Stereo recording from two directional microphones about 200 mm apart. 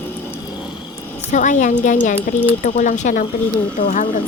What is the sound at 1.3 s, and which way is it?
Speech, 40° left (ahead or behind).